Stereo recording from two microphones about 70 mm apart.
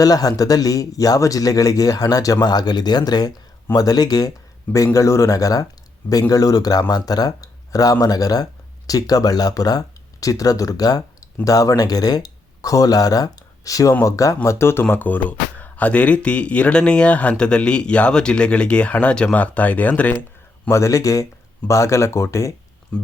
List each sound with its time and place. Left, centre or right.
0.0 s speech: left
4.9 s speech: left
20.7 s speech: left